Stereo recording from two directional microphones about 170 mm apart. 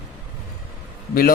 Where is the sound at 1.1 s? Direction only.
60° left (ahead or behind).